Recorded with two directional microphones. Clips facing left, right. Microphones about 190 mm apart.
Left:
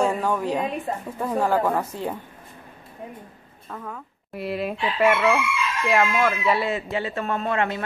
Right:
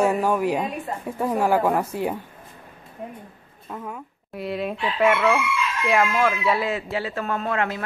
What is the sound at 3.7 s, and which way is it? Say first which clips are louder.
Speech: right 2 dB; 10° right (ahead or behind).